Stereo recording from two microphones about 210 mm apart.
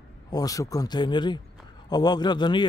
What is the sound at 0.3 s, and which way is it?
A man's voice, 15° left (ahead or behind).